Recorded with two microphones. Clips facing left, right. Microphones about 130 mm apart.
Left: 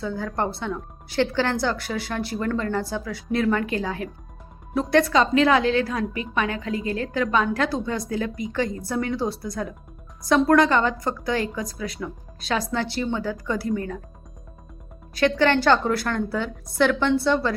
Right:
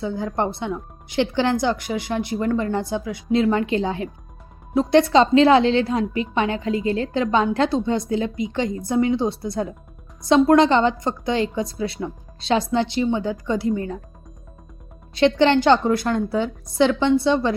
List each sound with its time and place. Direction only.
0.0 s a woman's voice: 20° right (ahead or behind)
15.1 s a woman's voice: 20° right (ahead or behind)